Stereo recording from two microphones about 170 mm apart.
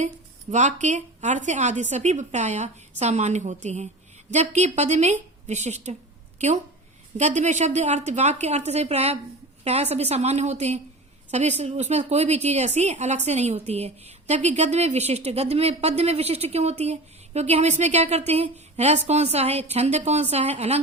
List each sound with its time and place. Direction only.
0.5 s a woman's voice: 45° right (ahead or behind)
7.2 s a woman's voice: 45° right (ahead or behind)